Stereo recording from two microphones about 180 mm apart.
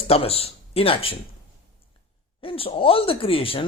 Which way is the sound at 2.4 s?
30° left (ahead or behind).